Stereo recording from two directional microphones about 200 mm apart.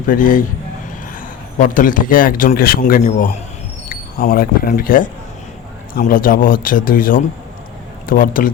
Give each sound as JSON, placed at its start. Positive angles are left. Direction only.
{"t": 0.1, "sound": "a man's voice", "side_deg": 40}
{"t": 1.5, "sound": "a man's voice", "side_deg": 40}